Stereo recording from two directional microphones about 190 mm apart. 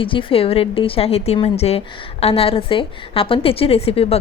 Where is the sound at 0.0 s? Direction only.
25° left (ahead or behind).